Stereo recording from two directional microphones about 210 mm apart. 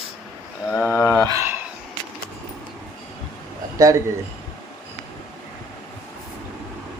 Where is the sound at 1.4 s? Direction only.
10° right (ahead or behind).